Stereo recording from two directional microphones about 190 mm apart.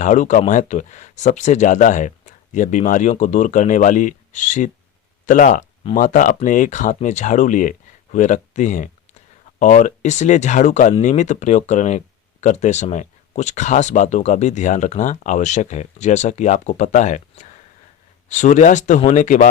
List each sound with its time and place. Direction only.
0.0 s speech: 40° left (ahead or behind)